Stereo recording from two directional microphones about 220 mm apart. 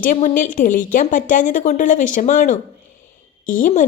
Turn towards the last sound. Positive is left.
turn(degrees=35)  # may be behind; listen again after turning